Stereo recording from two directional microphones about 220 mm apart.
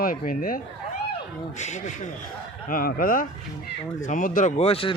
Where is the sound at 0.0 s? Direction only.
40° left (ahead or behind).